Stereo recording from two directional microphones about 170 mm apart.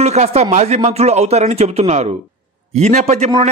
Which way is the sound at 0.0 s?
40° right (ahead or behind).